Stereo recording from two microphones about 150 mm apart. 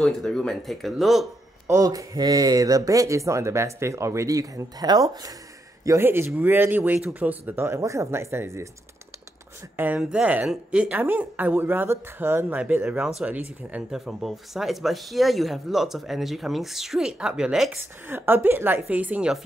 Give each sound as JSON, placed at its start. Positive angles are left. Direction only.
{"t": 0.0, "sound": "speech", "side_deg": 5}
{"t": 1.7, "sound": "speech", "side_deg": -20}
{"t": 9.8, "sound": "speech", "side_deg": -10}